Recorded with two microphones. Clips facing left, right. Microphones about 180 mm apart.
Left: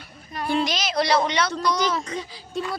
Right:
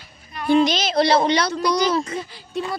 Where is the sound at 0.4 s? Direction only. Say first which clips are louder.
Right 7 dB; 20° right (ahead or behind).